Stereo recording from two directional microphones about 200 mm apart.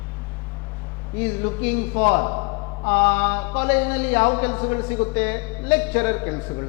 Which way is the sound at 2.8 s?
10° left (ahead or behind).